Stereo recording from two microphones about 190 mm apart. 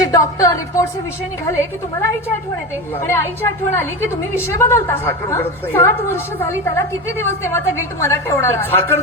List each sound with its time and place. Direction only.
0.0 s a woman's voice: 20° left (ahead or behind)